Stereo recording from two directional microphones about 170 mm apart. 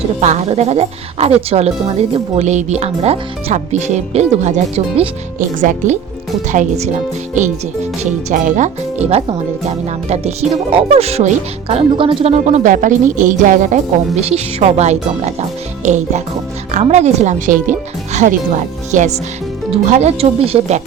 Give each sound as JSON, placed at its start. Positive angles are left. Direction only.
{"t": 0.2, "sound": "speech", "side_deg": -40}
{"t": 8.3, "sound": "speech", "side_deg": -45}
{"t": 10.7, "sound": "speech", "side_deg": -35}
{"t": 12.5, "sound": "speech", "side_deg": -45}